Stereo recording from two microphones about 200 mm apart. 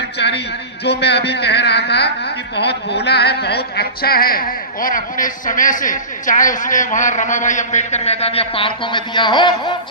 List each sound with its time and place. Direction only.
0.2 s a man's voice: 60° left (ahead or behind); by 9.7 s 25° left (ahead or behind)